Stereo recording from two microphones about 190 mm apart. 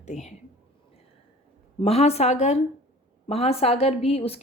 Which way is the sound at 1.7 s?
30° left (ahead or behind).